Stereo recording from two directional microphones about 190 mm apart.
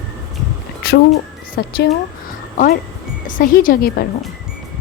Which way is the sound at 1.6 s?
55° left (ahead or behind).